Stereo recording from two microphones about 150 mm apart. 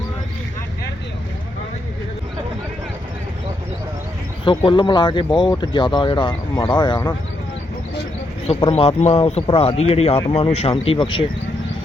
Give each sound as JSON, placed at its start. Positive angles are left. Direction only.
{"t": 4.4, "sound": "speech", "side_deg": 35}
{"t": 8.4, "sound": "a man's voice", "side_deg": 45}